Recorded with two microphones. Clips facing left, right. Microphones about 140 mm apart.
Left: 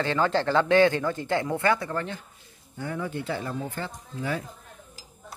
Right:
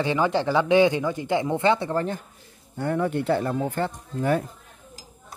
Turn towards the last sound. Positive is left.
turn(degrees=-50)  # may be behind; listen again after turning